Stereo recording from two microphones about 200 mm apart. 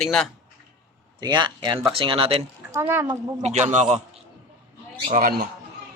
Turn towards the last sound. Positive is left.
turn(degrees=-45)  # may be behind; listen again after turning